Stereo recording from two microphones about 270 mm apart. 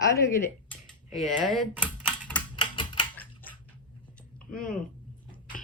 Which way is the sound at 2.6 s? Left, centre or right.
Centre.